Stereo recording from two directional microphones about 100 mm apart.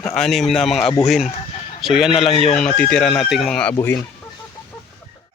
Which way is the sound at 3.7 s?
25° left (ahead or behind).